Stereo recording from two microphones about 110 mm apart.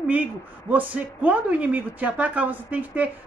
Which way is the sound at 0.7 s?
15° right (ahead or behind).